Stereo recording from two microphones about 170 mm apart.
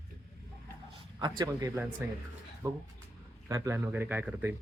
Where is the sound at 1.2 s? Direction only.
25° right (ahead or behind).